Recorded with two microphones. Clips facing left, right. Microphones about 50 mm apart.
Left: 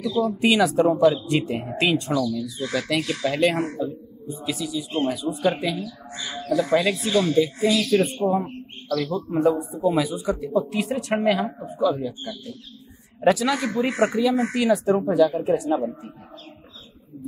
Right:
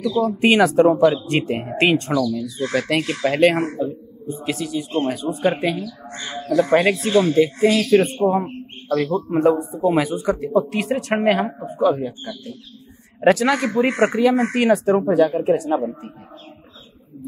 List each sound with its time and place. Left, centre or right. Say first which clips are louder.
0.4 s speech: right 5 dB; right